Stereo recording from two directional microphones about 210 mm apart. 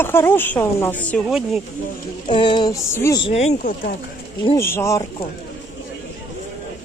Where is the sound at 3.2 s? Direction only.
30° left (ahead or behind).